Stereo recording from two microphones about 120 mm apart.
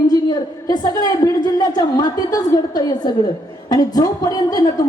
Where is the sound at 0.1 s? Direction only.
35° left (ahead or behind).